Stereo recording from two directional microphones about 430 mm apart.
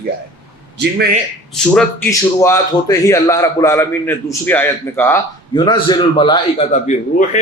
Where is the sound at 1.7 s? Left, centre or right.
Centre.